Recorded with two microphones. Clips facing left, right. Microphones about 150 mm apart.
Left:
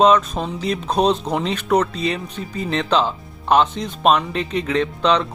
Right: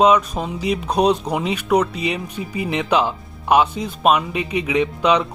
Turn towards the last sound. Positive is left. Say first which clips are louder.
# right 1 dB
turn(degrees=-10)  # may be behind; listen again after turning